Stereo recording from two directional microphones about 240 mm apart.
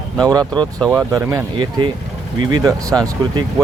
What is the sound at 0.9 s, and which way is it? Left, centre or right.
Speech, centre.